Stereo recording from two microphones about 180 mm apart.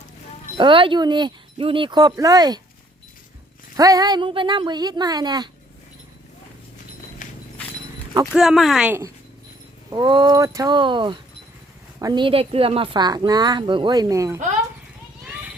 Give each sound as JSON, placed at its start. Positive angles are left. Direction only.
{"t": 0.5, "sound": "speech", "side_deg": -30}
{"t": 3.8, "sound": "speech", "side_deg": -20}
{"t": 7.2, "sound": "horse", "side_deg": 45}
{"t": 8.3, "sound": "speech", "side_deg": 0}
{"t": 9.9, "sound": "speech", "side_deg": -25}
{"t": 15.2, "sound": "children playing", "side_deg": -5}